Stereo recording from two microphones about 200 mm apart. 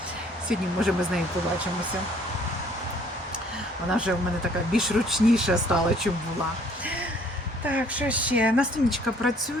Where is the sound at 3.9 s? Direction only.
5° right (ahead or behind).